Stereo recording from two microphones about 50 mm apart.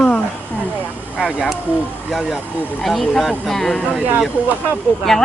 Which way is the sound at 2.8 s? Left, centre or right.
Centre.